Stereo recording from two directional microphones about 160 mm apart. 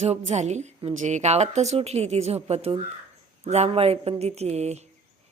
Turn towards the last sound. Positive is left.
turn(degrees=-45)  # may be behind; listen again after turning